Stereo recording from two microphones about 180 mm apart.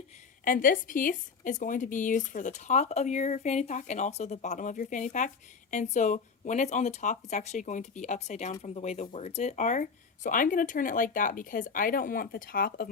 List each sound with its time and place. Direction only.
0.4 s a woman's voice: 50° left (ahead or behind)